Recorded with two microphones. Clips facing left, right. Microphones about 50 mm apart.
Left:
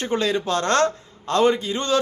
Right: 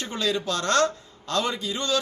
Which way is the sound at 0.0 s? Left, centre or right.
Left.